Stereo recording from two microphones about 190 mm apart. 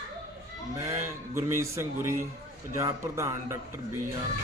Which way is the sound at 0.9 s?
15° right (ahead or behind).